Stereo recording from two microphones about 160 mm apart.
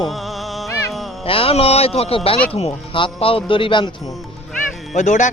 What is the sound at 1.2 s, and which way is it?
Speech, 35° left (ahead or behind).